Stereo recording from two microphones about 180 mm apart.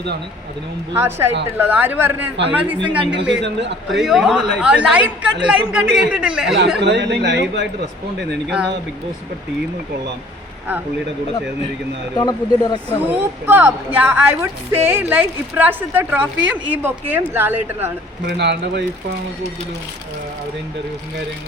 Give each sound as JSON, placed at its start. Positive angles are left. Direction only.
{"t": 0.9, "sound": "speech", "side_deg": -15}
{"t": 3.2, "sound": "speech", "side_deg": -75}
{"t": 4.0, "sound": "a woman's voice", "side_deg": 0}
{"t": 6.7, "sound": "speech", "side_deg": -75}
{"t": 8.4, "sound": "a woman's voice", "side_deg": -5}
{"t": 12.1, "sound": "speech", "side_deg": 20}
{"t": 13.1, "sound": "speech", "side_deg": -10}
{"t": 18.3, "sound": "speech", "side_deg": -70}